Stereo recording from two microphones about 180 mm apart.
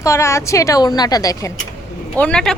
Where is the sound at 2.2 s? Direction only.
5° left (ahead or behind).